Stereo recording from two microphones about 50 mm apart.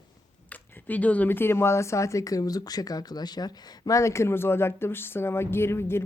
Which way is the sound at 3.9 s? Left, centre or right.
Left.